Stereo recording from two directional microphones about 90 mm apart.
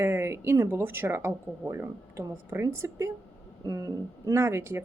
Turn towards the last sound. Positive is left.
turn(degrees=-30)  # may be behind; listen again after turning